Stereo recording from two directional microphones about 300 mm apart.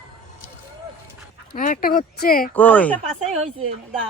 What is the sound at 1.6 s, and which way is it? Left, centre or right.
Speech, left.